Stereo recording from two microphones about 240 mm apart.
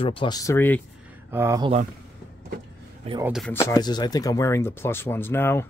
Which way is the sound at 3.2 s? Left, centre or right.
Centre.